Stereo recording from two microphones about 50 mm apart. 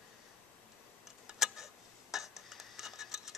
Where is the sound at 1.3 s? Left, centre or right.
Centre.